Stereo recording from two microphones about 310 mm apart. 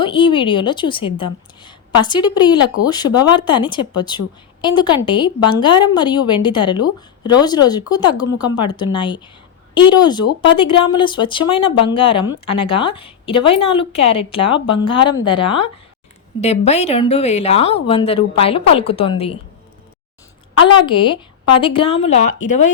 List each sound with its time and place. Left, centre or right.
0.0 s a woman's voice: centre
20.8 s a woman's voice: centre